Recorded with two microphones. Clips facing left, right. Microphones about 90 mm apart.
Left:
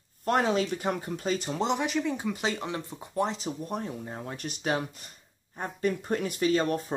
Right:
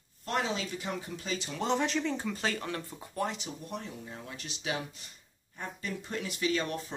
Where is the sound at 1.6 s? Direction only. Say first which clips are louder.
Left 1 dB; 10° left (ahead or behind).